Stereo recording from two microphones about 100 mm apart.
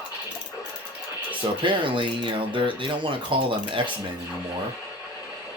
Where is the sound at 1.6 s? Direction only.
55° right (ahead or behind).